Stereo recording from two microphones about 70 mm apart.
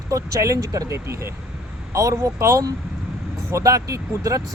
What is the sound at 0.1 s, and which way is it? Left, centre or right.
Speech, right.